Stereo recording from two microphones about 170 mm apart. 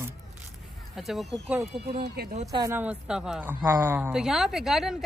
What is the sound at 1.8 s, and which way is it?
Speech, 70° right (ahead or behind).